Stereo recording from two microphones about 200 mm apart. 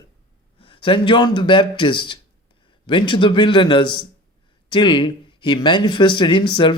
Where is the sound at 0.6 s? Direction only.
25° left (ahead or behind).